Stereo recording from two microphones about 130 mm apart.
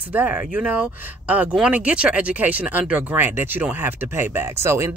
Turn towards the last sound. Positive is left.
turn(degrees=-20)  # may be behind; listen again after turning